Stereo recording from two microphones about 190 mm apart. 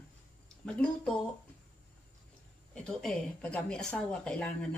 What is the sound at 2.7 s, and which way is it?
A woman's voice, 5° left (ahead or behind).